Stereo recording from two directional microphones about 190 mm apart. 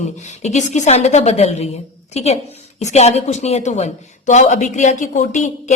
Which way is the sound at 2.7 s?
35° left (ahead or behind).